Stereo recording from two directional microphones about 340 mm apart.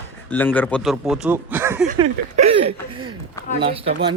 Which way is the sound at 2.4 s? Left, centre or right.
Centre.